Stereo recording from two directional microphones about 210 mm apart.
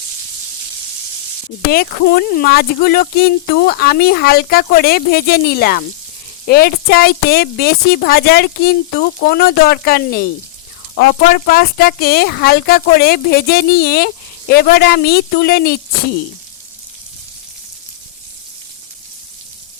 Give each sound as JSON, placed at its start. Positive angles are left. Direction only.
{"t": 1.7, "sound": "speech", "side_deg": 45}